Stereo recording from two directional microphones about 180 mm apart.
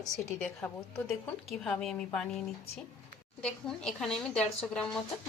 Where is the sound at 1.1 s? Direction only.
Centre (ahead or behind).